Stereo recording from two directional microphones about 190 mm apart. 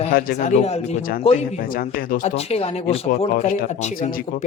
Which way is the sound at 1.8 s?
45° left (ahead or behind).